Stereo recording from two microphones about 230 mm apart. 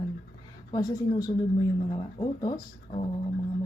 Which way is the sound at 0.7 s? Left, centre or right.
Centre.